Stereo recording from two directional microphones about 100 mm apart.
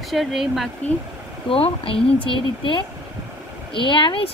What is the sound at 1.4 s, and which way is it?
Speech, 65° left (ahead or behind).